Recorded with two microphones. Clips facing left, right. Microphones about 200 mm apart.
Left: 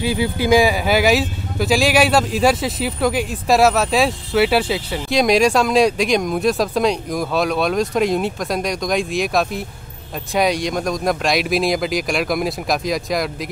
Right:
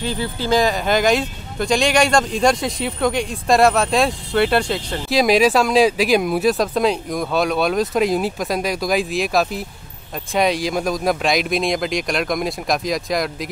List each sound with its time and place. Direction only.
0.0 s speech: 10° left (ahead or behind)